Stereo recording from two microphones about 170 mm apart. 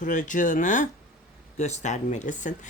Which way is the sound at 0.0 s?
50° left (ahead or behind).